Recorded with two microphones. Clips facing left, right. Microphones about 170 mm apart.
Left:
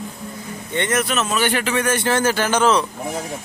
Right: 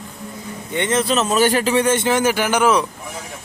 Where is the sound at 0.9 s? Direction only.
25° right (ahead or behind).